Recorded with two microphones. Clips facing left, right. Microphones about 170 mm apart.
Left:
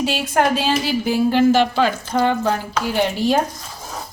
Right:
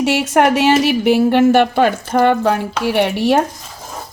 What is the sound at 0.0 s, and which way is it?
A woman's voice, 75° right (ahead or behind).